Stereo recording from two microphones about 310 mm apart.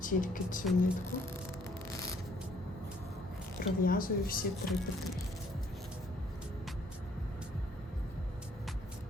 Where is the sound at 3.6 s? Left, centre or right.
Left.